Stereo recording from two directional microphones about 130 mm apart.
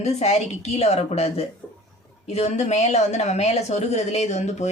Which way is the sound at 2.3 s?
55° left (ahead or behind).